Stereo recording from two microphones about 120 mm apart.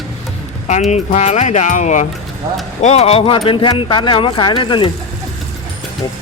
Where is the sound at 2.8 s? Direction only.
65° left (ahead or behind); by 4.9 s 45° left (ahead or behind).